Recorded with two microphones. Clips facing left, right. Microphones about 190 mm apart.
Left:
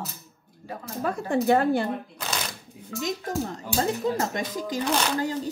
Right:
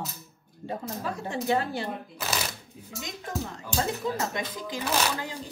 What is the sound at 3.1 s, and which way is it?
Speech, 40° left (ahead or behind).